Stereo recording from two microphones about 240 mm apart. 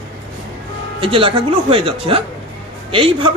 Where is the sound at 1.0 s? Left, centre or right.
Right.